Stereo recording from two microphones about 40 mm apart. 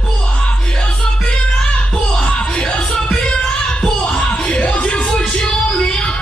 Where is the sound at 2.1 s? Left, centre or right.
Left.